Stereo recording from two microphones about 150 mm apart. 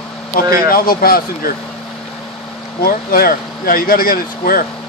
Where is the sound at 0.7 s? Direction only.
80° left.